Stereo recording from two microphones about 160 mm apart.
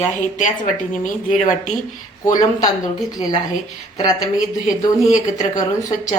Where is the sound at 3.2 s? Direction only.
25° left (ahead or behind).